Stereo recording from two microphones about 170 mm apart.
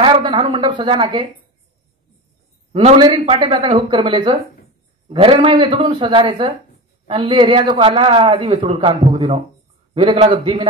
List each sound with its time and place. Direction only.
0.0 s a sound: 25° right (ahead or behind)
0.4 s speech: 30° right (ahead or behind)
2.7 s speech: 30° right (ahead or behind)